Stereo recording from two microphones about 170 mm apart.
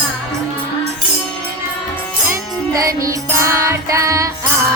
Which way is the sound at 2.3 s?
20° right (ahead or behind).